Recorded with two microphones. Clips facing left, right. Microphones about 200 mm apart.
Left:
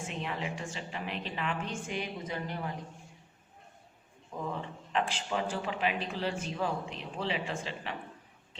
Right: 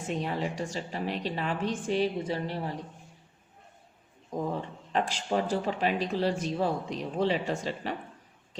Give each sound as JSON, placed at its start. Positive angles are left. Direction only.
{"t": 0.0, "sound": "speech", "side_deg": -40}
{"t": 4.3, "sound": "speech", "side_deg": -40}